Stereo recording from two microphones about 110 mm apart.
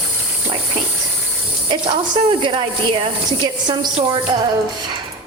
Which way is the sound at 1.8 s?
60° right (ahead or behind).